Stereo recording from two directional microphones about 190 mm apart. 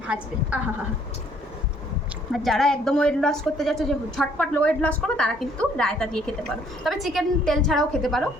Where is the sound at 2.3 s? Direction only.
Centre (ahead or behind).